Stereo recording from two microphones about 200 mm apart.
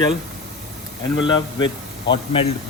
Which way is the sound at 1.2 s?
25° left (ahead or behind).